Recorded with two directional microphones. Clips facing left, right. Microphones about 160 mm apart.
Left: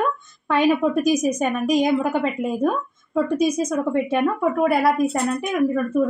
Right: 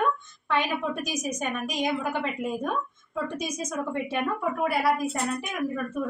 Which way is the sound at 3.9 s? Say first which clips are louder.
Left 7 dB; 55° left (ahead or behind).